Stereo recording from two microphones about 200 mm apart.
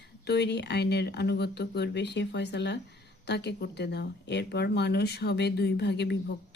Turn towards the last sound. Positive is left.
turn(degrees=60)  # may be behind; listen again after turning